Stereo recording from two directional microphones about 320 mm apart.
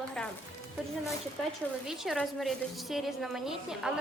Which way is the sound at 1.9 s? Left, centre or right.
Centre.